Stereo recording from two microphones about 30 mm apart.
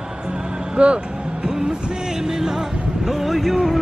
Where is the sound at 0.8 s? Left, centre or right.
Right.